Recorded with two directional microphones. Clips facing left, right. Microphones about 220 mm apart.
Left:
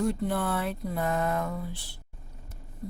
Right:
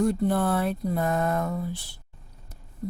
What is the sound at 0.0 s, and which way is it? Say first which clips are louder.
Speech: right 5 dB; 45° right (ahead or behind).